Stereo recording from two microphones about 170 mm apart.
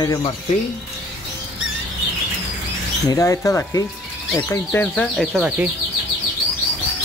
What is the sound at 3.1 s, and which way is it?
Speech, 20° left (ahead or behind).